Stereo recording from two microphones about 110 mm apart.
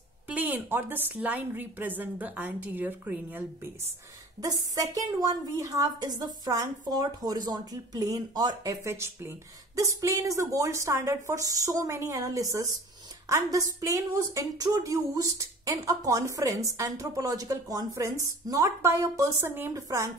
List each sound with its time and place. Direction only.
0.3 s a woman's voice: 15° right (ahead or behind)
4.4 s a woman's voice: 35° right (ahead or behind)